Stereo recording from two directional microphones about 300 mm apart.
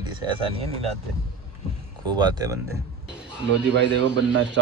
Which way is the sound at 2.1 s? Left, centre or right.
Centre.